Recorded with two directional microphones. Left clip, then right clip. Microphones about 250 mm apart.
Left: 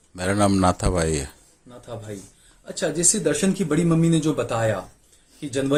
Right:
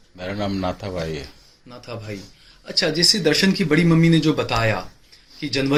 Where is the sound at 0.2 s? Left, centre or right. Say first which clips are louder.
Left 6 dB; left.